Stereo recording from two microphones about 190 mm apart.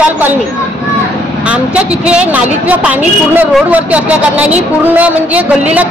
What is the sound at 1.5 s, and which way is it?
A man's voice, 5° right (ahead or behind).